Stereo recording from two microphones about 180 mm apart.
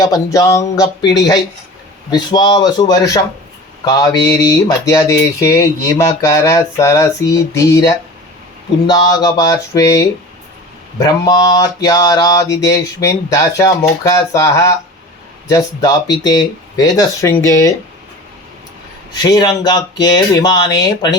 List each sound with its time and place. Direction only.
0.0 s speech: 20° left (ahead or behind)
2.0 s speech: 25° left (ahead or behind)
19.2 s speech: 20° left (ahead or behind)